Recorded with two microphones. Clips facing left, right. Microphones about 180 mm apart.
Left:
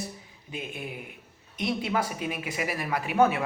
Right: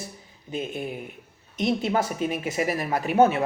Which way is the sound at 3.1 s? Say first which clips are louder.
Right 4 dB; 25° right (ahead or behind).